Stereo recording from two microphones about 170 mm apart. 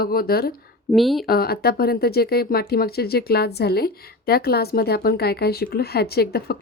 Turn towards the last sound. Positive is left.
turn(degrees=65)  # may be behind; listen again after turning